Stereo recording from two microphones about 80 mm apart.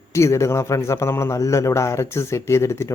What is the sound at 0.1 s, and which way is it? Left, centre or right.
Speech, left.